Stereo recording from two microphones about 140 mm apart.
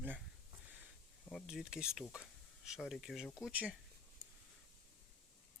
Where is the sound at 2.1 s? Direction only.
5° right (ahead or behind).